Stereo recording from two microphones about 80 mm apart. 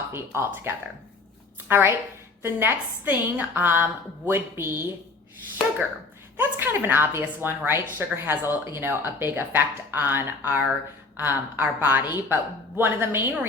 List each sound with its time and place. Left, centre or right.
0.1 s a woman's voice: right
6.3 s a woman's voice: right